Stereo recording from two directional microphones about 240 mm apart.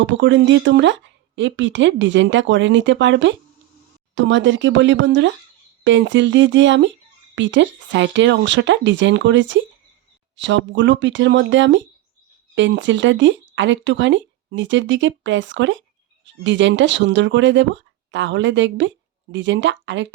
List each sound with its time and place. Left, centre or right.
0.0 s speech: right